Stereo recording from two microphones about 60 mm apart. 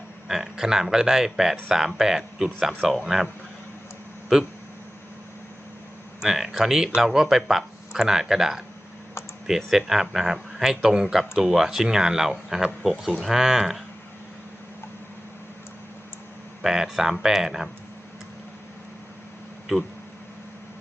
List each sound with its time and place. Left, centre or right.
0.3 s speech: centre
4.3 s speech: centre
6.2 s speech: centre
16.6 s speech: centre